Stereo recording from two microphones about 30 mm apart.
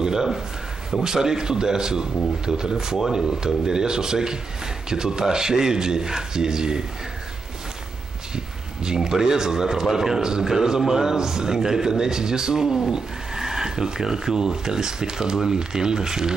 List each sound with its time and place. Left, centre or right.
0.0 s speech: centre
8.8 s speech: right